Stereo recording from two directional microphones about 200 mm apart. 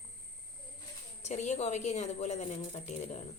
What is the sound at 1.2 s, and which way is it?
A woman's voice, 35° left (ahead or behind).